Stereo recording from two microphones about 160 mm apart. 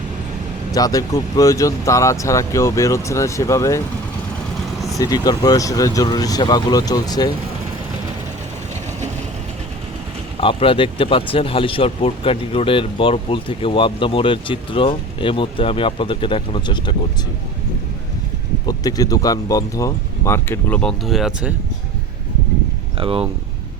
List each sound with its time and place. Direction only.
0.7 s speech: 25° left (ahead or behind)
4.9 s speech: 25° left (ahead or behind)
10.4 s speech: 35° left (ahead or behind)
18.6 s speech: 25° left (ahead or behind); by 21.5 s centre (ahead or behind)
23.0 s speech: 35° right (ahead or behind)